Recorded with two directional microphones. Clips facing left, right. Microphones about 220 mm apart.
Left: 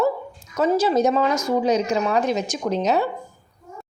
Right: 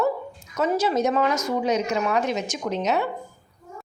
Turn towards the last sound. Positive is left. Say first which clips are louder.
# left 3 dB
turn(degrees=35)  # may be behind; listen again after turning